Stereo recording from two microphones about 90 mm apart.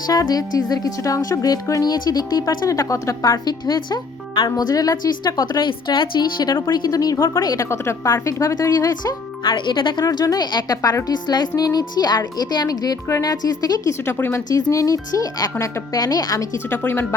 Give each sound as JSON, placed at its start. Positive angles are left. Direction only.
{"t": 0.1, "sound": "speech", "side_deg": 45}
{"t": 2.7, "sound": "speech", "side_deg": 35}
{"t": 4.4, "sound": "speech", "side_deg": 45}
{"t": 7.7, "sound": "speech", "side_deg": 30}
{"t": 9.4, "sound": "speech", "side_deg": 65}
{"t": 10.0, "sound": "speech", "side_deg": 45}
{"t": 14.0, "sound": "speech", "side_deg": 25}
{"t": 14.5, "sound": "speech", "side_deg": 40}
{"t": 15.5, "sound": "speech", "side_deg": 30}
{"t": 16.6, "sound": "speech", "side_deg": 25}